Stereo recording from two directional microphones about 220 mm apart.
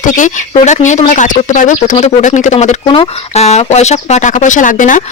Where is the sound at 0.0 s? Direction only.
35° left (ahead or behind).